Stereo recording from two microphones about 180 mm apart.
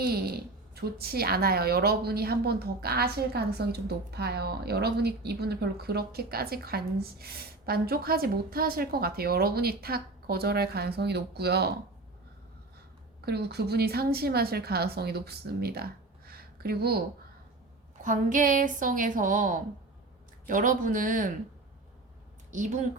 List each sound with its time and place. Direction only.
0.0 s speech: 60° right (ahead or behind)
13.2 s speech: 65° right (ahead or behind)
18.0 s a woman's voice: 45° right (ahead or behind)
22.5 s a woman's voice: 45° right (ahead or behind)